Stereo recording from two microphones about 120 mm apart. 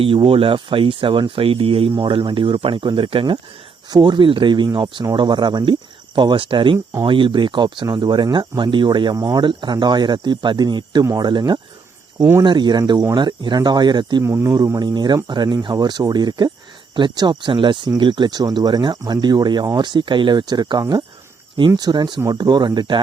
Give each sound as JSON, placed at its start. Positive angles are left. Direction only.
{"t": 0.0, "sound": "speech", "side_deg": -50}
{"t": 14.3, "sound": "speech", "side_deg": -25}